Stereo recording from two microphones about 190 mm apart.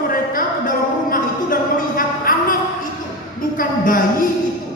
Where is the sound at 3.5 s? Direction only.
45° left (ahead or behind).